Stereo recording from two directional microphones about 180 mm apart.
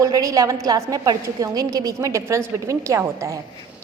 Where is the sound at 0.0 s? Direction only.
20° right (ahead or behind).